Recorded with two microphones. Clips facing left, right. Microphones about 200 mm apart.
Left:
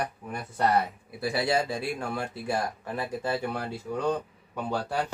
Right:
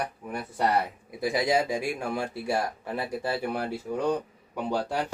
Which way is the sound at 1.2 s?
15° right (ahead or behind).